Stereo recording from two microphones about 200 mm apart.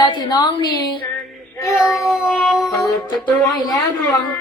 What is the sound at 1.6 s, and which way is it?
Child singing, 15° left (ahead or behind).